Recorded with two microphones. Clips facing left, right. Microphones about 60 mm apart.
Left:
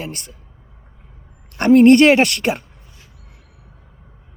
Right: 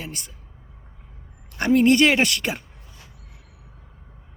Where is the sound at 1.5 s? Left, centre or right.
Left.